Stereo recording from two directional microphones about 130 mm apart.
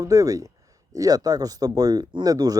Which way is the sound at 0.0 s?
25° right (ahead or behind).